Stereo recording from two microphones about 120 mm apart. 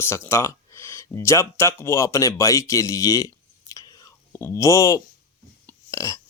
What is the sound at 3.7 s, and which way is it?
Whispering, 30° left (ahead or behind).